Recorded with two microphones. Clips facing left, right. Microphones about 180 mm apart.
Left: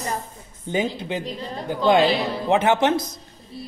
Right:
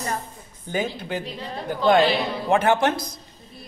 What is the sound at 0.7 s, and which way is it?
Speech, 25° left (ahead or behind).